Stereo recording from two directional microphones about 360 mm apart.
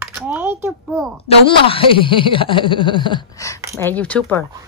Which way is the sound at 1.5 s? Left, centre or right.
Centre.